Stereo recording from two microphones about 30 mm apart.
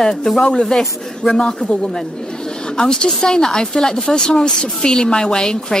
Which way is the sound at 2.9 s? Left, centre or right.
Left.